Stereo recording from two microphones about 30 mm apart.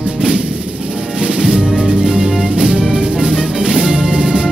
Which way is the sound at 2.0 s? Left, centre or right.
Right.